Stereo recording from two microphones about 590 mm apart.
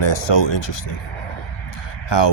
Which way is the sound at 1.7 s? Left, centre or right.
Left.